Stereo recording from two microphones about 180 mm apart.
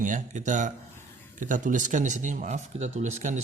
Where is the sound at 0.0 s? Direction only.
45° right (ahead or behind).